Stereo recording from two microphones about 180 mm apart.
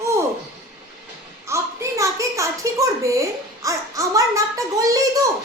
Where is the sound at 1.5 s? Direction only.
15° right (ahead or behind).